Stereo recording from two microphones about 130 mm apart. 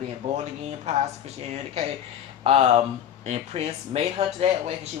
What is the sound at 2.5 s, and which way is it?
Speech, 50° right (ahead or behind).